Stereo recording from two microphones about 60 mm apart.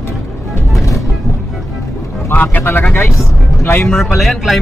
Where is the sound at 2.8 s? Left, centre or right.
Left.